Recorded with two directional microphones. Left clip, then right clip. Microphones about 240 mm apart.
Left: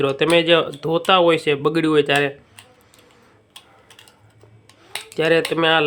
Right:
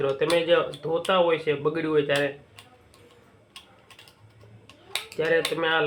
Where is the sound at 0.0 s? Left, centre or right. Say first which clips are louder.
Left 7 dB; left.